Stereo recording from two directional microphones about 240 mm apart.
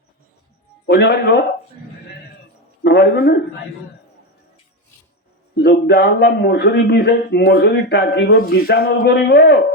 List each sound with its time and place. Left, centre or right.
0.9 s a man's voice: left
2.8 s a man's voice: left
5.5 s a man's voice: left